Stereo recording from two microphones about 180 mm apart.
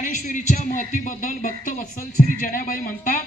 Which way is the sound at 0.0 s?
45° left (ahead or behind).